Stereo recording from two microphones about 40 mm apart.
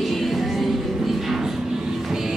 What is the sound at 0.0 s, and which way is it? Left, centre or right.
Music, centre.